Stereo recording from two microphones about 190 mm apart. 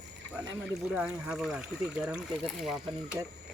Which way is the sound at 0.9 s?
5° right (ahead or behind).